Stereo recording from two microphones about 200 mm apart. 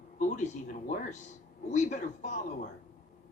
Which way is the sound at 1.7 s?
35° left (ahead or behind).